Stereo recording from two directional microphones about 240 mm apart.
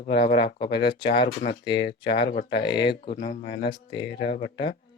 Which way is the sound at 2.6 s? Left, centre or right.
Centre.